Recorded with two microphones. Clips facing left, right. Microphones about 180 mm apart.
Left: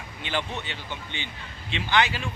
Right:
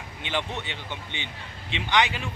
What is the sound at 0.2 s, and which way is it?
Speech, 20° right (ahead or behind).